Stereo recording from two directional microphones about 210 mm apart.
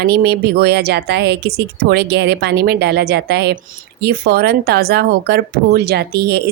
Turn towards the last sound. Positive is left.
turn(degrees=-50)  # may be behind; listen again after turning